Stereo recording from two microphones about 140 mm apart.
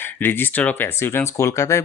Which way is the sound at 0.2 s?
15° left (ahead or behind).